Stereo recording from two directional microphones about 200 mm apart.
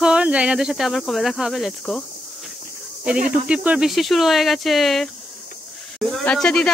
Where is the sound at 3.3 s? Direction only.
5° right (ahead or behind).